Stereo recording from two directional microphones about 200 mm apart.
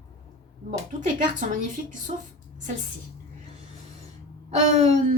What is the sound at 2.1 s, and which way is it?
Speech, 30° right (ahead or behind).